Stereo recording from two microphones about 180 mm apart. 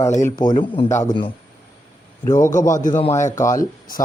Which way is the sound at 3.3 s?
15° left (ahead or behind).